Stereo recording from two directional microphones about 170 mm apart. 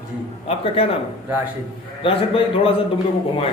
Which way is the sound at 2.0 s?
30° left (ahead or behind).